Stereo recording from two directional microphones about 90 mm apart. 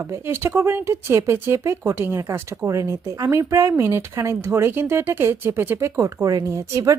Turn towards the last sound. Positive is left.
turn(degrees=-40)  # may be behind; listen again after turning